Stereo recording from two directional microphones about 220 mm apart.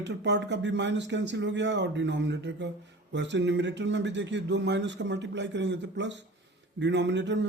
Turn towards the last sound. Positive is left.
turn(degrees=-55)  # may be behind; listen again after turning